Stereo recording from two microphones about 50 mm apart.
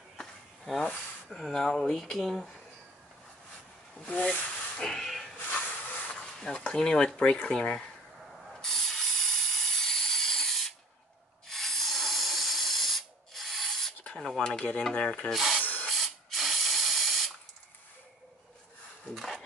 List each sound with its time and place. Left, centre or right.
0.7 s speech: centre
4.1 s speech: left
4.8 s hiss: centre
5.4 s hiss: left
6.1 s speech: centre
8.5 s a sound: centre
11.4 s hiss: centre
13.9 s a sound: left
14.2 s speech: centre
15.3 s speech: centre
15.6 s hiss: left
15.9 s spray: centre